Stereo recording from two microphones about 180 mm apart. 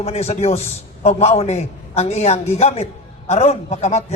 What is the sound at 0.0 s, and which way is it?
A man's voice, 35° left (ahead or behind).